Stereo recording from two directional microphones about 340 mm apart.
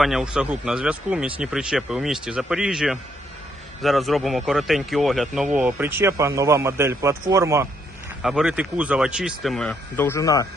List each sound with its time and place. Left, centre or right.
0.0 s a man's voice: centre